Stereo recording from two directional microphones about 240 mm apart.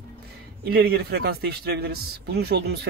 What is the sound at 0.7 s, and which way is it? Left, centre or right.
A man's voice, right.